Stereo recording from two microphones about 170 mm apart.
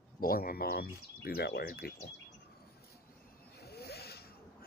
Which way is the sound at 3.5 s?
70° left (ahead or behind).